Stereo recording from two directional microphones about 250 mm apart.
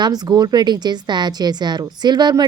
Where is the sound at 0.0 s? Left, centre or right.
Centre.